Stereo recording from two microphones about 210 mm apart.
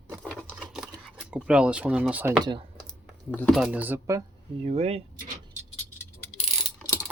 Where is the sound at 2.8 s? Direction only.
5° left (ahead or behind).